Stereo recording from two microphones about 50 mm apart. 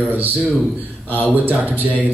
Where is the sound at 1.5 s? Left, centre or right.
Right.